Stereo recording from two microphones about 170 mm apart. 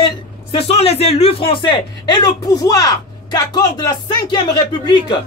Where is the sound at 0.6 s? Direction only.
35° left (ahead or behind).